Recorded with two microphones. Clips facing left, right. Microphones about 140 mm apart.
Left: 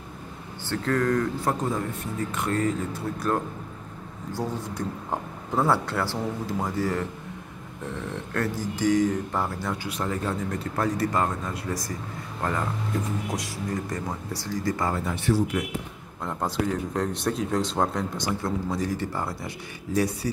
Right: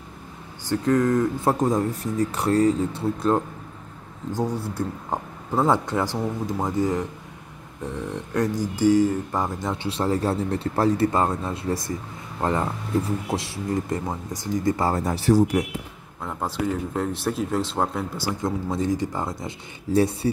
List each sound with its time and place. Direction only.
0.7 s speech: 20° right (ahead or behind)
1.5 s speech: 40° right (ahead or behind)
4.3 s speech: 15° right (ahead or behind)
14.9 s speech: 35° right (ahead or behind)
16.2 s speech: centre (ahead or behind)
18.4 s speech: 20° right (ahead or behind)